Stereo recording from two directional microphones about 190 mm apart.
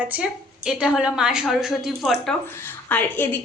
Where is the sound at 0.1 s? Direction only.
5° right (ahead or behind).